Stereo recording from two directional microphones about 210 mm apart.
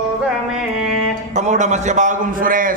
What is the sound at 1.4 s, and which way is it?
A man's voice, 35° right (ahead or behind).